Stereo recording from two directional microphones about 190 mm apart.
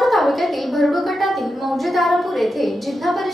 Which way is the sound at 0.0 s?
Centre (ahead or behind).